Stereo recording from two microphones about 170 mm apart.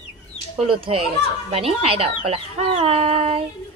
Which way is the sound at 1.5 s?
35° right (ahead or behind).